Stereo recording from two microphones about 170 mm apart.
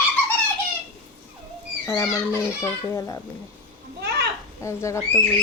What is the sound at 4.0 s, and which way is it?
Children playing, 80° right.